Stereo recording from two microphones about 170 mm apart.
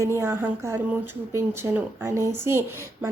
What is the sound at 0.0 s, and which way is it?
A woman's voice, 15° right (ahead or behind).